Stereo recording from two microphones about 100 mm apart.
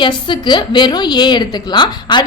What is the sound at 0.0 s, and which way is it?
A woman's voice, 50° left (ahead or behind).